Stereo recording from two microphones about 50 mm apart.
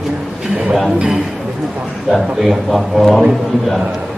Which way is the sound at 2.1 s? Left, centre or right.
Centre.